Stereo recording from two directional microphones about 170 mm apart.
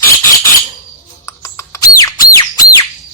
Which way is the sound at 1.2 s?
15° left (ahead or behind).